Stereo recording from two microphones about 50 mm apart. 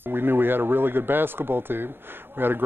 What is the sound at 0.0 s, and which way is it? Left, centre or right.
Speech, right.